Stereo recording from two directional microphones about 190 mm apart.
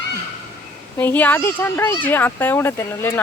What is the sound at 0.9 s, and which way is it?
Speech, 10° left (ahead or behind).